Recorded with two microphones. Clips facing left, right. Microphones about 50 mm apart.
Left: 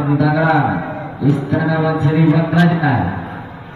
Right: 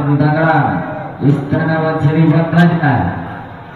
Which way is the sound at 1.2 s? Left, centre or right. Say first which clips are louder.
Right 2 dB; centre.